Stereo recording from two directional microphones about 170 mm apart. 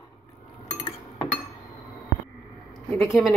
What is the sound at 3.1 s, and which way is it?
Speech, centre (ahead or behind).